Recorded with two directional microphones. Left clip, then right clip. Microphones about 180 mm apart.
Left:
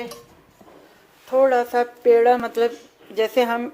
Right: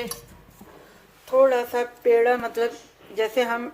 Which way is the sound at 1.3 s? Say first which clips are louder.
Left 2 dB; 25° left (ahead or behind).